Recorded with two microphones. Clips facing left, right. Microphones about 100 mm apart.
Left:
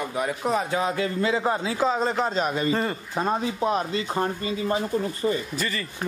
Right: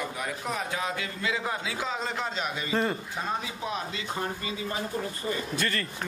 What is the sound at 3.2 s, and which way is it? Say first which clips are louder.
Speech: left 8 dB; 45° left (ahead or behind).